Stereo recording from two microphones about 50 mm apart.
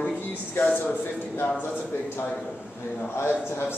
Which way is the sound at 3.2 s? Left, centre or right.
Left.